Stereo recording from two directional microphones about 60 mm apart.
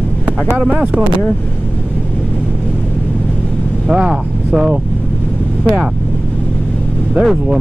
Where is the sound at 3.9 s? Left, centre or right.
Centre.